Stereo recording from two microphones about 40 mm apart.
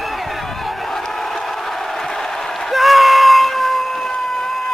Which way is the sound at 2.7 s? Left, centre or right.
Centre.